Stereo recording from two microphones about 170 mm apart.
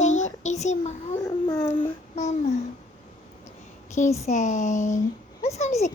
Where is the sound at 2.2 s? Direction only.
40° left (ahead or behind).